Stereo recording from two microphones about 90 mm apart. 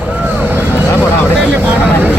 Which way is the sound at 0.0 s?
15° right (ahead or behind).